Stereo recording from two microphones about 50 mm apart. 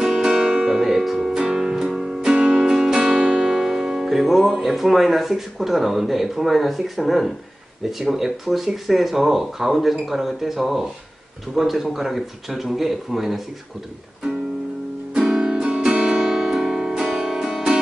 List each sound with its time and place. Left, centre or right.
0.0 s music: centre
0.6 s music: centre
3.3 s speech: centre
15.1 s music: centre